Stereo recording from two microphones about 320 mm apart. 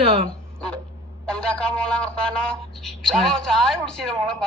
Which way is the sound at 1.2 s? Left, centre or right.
Centre.